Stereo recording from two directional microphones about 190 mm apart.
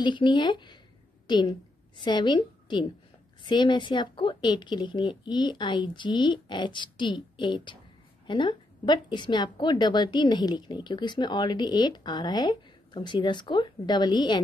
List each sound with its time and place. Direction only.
0.0 s a woman's voice: 25° left (ahead or behind)
1.2 s a sound: 25° left (ahead or behind)
2.0 s a woman's voice: 25° left (ahead or behind)